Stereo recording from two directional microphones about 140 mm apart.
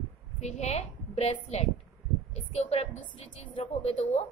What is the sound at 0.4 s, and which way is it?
A woman's voice, 55° left (ahead or behind).